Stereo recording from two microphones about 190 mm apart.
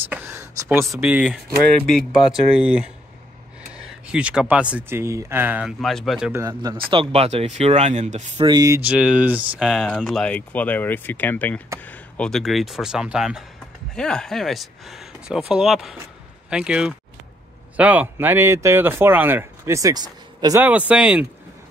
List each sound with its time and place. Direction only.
0.1 s a sound: 10° right (ahead or behind)
0.9 s speech: 5° right (ahead or behind)
6.4 s speech: 20° right (ahead or behind); by 8.2 s 35° right (ahead or behind)
8.4 s speech: 20° right (ahead or behind)
20.6 s speech: 5° right (ahead or behind)